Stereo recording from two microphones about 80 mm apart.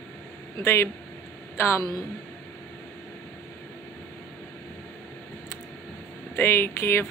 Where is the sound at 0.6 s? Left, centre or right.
Left.